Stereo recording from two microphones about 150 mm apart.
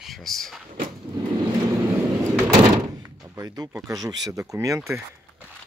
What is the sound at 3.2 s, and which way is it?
Speech, 25° right (ahead or behind).